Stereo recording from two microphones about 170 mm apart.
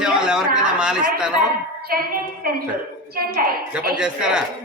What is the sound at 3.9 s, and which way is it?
Speech, 5° right (ahead or behind).